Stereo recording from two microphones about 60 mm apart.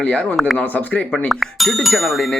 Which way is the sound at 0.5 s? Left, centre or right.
Left.